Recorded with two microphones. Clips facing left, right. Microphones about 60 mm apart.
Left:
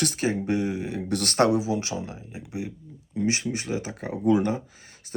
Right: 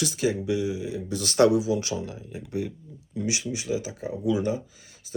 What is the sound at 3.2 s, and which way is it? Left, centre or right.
Speech, left.